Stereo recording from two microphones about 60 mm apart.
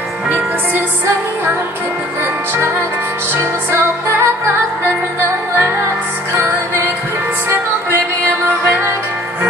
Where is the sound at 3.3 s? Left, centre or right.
Right.